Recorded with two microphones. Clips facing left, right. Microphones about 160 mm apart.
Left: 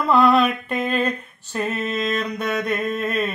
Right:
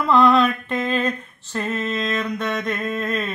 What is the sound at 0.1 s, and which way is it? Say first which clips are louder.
Mantra: even; 10° left (ahead or behind).